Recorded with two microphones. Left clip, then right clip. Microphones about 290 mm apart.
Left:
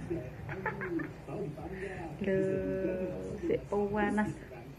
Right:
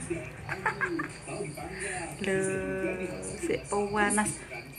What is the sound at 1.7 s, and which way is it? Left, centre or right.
Music, centre.